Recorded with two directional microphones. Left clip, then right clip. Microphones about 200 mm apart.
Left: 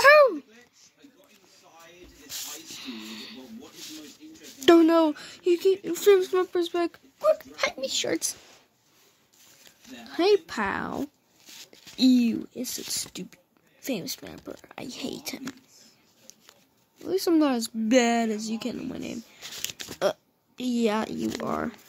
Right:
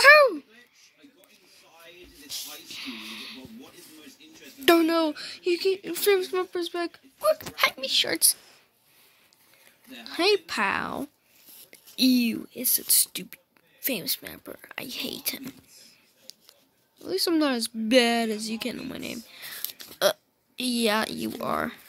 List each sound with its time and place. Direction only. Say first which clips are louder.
0.0 s a sound: right 1 dB; 10° left (ahead or behind)
2.2 s snake: even; 5° left (ahead or behind)
4.6 s speech: left 3 dB; 20° left (ahead or behind)
7.8 s speech: right 3 dB; centre (ahead or behind)
10.0 s speech: left 1 dB; 10° left (ahead or behind)
11.7 s a sound: left 1 dB; 5° left (ahead or behind)
12.4 s speech: right 1 dB; 5° left (ahead or behind)
16.3 s a sound: right 5 dB; 10° left (ahead or behind)
17.0 s a woman's voice: left 1 dB; 5° left (ahead or behind)